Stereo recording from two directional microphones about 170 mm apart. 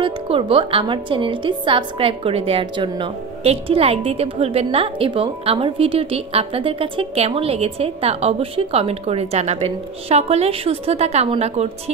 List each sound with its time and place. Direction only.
0.0 s a woman's voice: 30° right (ahead or behind)